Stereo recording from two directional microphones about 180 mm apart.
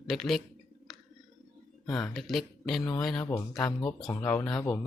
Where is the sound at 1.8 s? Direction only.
Centre (ahead or behind).